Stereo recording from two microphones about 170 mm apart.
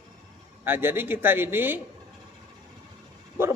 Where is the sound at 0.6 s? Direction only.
10° right (ahead or behind).